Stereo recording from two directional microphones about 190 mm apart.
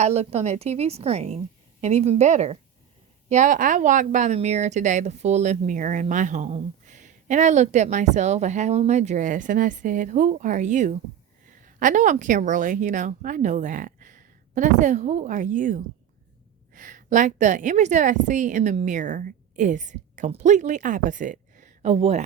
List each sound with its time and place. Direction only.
0.0 s a woman's voice: 35° right (ahead or behind)